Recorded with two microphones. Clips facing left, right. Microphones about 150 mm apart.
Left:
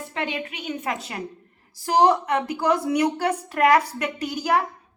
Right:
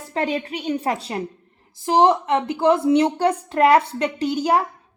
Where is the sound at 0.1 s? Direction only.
35° right (ahead or behind).